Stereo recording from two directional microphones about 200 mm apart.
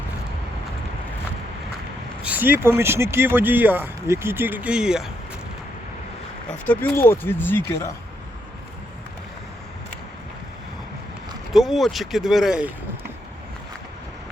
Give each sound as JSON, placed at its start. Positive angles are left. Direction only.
{"t": 2.2, "sound": "speech", "side_deg": -10}
{"t": 6.7, "sound": "speech", "side_deg": 10}
{"t": 11.5, "sound": "speech", "side_deg": 0}